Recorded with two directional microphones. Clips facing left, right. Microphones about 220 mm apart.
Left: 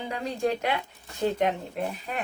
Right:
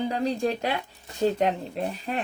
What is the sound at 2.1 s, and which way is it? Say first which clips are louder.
Speech: right 3 dB; 35° right (ahead or behind).